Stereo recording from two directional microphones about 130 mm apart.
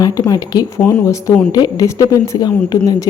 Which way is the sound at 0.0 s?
25° left (ahead or behind).